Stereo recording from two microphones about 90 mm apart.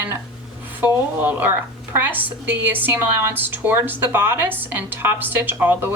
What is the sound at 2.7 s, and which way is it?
A woman's voice, 20° right (ahead or behind).